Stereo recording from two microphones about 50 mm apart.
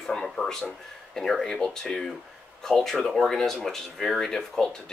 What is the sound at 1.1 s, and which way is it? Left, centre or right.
Speech, centre.